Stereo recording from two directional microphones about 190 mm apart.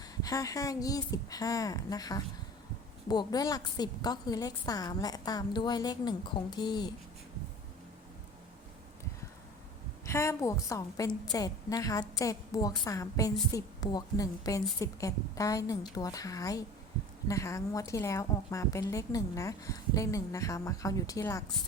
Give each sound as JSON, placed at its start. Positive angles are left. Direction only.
{"t": 0.2, "sound": "a woman's voice", "side_deg": 20}
{"t": 10.1, "sound": "a woman's voice", "side_deg": 15}